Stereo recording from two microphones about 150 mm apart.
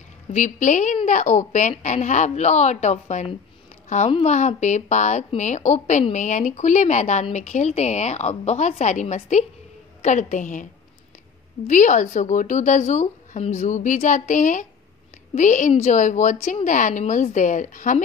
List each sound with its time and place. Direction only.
0.3 s a woman's voice: 55° left (ahead or behind)